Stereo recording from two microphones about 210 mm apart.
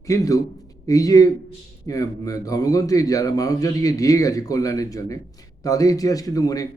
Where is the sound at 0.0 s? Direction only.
15° left (ahead or behind).